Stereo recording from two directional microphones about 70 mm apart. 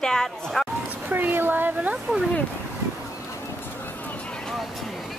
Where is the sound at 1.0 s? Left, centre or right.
Right.